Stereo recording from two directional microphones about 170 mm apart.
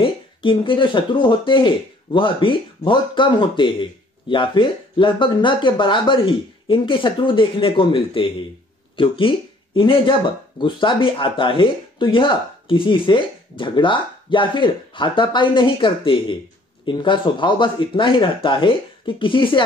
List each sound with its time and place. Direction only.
0.0 s speech: 30° left (ahead or behind)